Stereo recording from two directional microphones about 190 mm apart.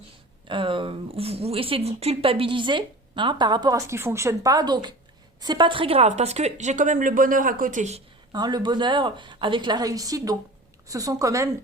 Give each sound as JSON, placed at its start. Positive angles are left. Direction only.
{"t": 0.4, "sound": "a woman's voice", "side_deg": -25}
{"t": 8.3, "sound": "a woman's voice", "side_deg": -20}